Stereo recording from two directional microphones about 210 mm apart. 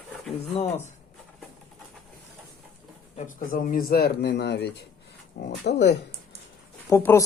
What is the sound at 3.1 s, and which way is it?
Speech, 40° left (ahead or behind).